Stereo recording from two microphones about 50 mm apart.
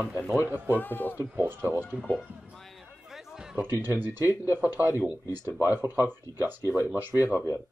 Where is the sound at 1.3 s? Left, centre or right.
Right.